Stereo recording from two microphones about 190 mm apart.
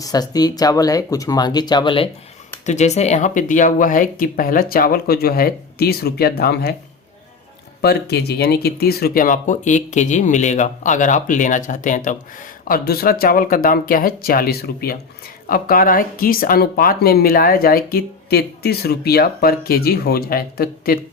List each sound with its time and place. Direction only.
0.0 s speech: 20° left (ahead or behind)
2.6 s speech: 35° left (ahead or behind); by 6.7 s 55° left (ahead or behind)
7.8 s speech: 60° left (ahead or behind)